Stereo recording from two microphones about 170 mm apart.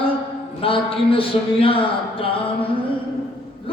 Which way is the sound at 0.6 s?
30° left (ahead or behind).